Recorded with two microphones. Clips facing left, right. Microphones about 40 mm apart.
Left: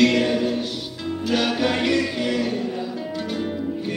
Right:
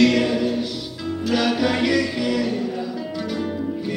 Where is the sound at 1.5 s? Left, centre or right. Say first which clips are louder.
Right 1 dB; left.